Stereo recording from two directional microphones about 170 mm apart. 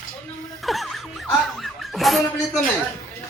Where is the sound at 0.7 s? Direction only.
Centre (ahead or behind).